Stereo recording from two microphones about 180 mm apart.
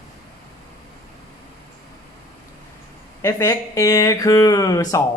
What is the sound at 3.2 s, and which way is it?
Speech, 15° left (ahead or behind).